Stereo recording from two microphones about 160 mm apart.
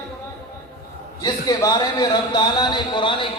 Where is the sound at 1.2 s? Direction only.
25° left (ahead or behind).